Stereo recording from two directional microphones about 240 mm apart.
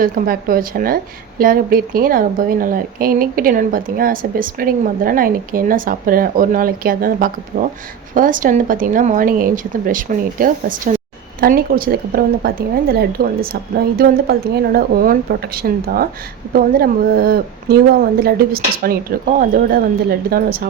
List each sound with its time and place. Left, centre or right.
0.0 s a woman's voice: right